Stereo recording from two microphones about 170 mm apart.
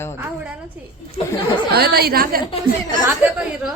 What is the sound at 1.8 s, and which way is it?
Speech, 65° right (ahead or behind).